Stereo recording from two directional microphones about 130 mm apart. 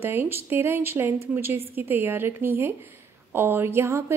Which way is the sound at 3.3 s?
15° right (ahead or behind).